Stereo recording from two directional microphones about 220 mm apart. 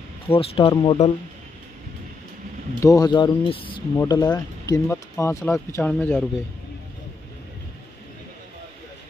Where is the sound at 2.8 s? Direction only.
15° left (ahead or behind).